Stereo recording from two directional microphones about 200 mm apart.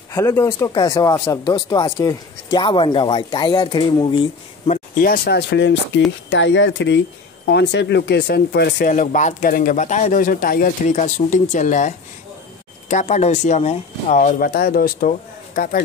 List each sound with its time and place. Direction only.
0.1 s speech: 15° left (ahead or behind)
5.0 s speech: 50° left (ahead or behind)
8.9 s speech: 35° left (ahead or behind)